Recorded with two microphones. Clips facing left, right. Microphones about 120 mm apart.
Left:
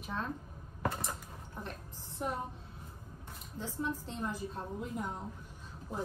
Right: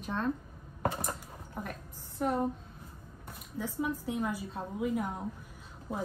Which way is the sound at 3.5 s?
60° right (ahead or behind).